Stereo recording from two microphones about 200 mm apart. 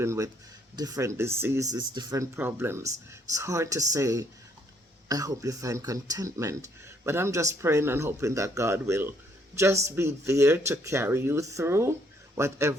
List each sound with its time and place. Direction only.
0.0 s speech: 15° right (ahead or behind)